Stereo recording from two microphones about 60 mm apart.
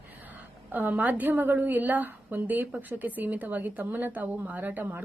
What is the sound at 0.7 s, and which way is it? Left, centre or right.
A woman's voice, right.